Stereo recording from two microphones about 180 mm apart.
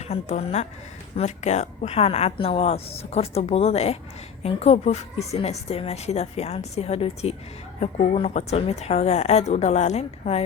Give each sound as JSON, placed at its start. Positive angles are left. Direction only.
{"t": 0.0, "sound": "speech", "side_deg": 35}